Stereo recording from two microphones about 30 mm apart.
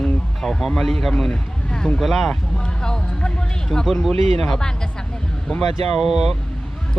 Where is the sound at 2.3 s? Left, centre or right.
Left.